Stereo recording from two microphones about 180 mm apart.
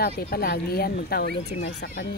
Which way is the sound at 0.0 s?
60° left (ahead or behind).